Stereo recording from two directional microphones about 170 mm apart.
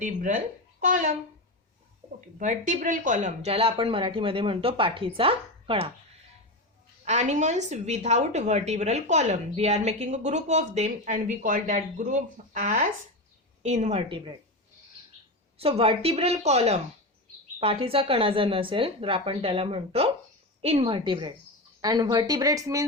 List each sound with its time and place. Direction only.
0.0 s speech: 50° right (ahead or behind)
2.4 s speech: 50° right (ahead or behind); by 5.9 s 35° right (ahead or behind)
7.0 s a woman's voice: 40° right (ahead or behind)
15.5 s speech: 35° right (ahead or behind); by 22.8 s 20° right (ahead or behind)